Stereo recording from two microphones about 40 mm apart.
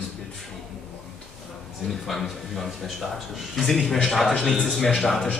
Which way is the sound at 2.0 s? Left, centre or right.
Centre.